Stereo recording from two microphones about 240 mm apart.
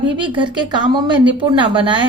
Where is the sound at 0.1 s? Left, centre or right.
Centre.